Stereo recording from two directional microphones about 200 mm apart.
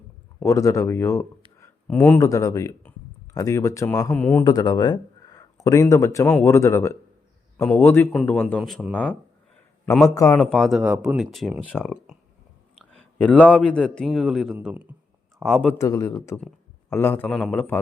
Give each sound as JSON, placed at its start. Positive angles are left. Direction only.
{"t": 0.4, "sound": "speech", "side_deg": 15}
{"t": 4.4, "sound": "a man's voice", "side_deg": 20}
{"t": 10.3, "sound": "a man's voice", "side_deg": 5}
{"t": 15.8, "sound": "speech", "side_deg": 15}